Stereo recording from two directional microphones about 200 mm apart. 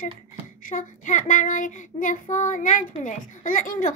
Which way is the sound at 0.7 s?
40° left (ahead or behind).